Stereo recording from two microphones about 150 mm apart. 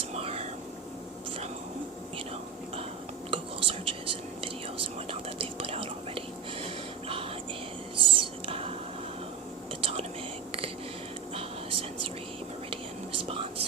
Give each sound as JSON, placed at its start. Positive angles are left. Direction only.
{"t": 0.0, "sound": "whispering", "side_deg": -40}
{"t": 3.2, "sound": "whispering", "side_deg": -35}
{"t": 5.4, "sound": "whispering", "side_deg": -40}
{"t": 7.9, "sound": "whispering", "side_deg": -35}
{"t": 9.8, "sound": "whispering", "side_deg": -45}
{"t": 11.3, "sound": "whispering", "side_deg": -40}
{"t": 13.2, "sound": "whispering", "side_deg": -40}